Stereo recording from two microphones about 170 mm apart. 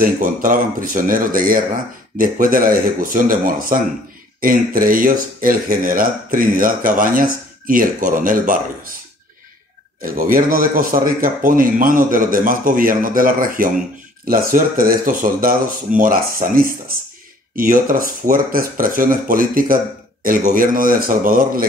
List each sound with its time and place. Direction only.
0.0 s speech: 55° right (ahead or behind)
10.0 s a man's voice: 55° right (ahead or behind)